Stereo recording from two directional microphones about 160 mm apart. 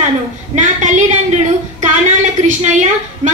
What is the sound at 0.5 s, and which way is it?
A woman's voice, 50° right (ahead or behind).